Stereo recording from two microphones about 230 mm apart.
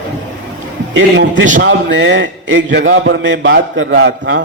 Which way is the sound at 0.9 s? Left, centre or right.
Right.